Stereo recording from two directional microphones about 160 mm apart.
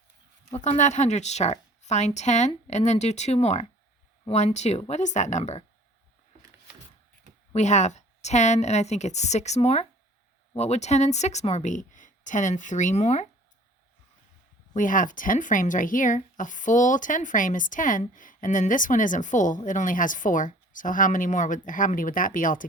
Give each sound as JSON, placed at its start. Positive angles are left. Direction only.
{"t": 0.5, "sound": "speech", "side_deg": 45}
{"t": 7.5, "sound": "speech", "side_deg": 45}
{"t": 14.8, "sound": "speech", "side_deg": 55}